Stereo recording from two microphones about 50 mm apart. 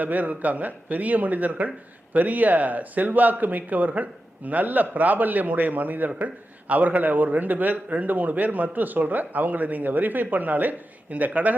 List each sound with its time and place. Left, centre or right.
0.0 s a man's voice: right